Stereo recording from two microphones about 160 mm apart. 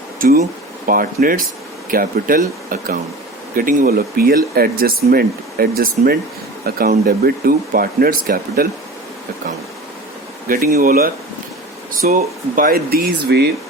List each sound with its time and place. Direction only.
0.2 s speech: 60° right (ahead or behind)
10.5 s speech: 65° right (ahead or behind); by 13.5 s 85° right